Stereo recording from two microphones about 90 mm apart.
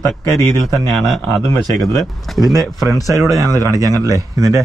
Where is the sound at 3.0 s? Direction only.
35° right (ahead or behind).